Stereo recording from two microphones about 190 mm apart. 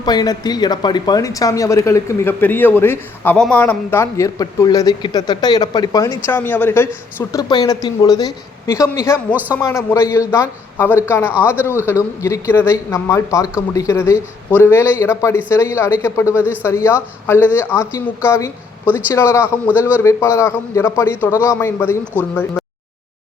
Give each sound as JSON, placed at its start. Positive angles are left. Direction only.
{"t": 0.0, "sound": "speech", "side_deg": 20}
{"t": 9.3, "sound": "speech", "side_deg": -10}
{"t": 9.6, "sound": "speech", "side_deg": 15}